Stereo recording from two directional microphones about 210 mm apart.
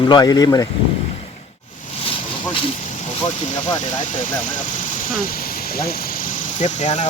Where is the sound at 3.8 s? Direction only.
35° left (ahead or behind).